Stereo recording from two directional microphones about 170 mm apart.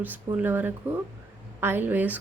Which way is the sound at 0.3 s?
10° right (ahead or behind).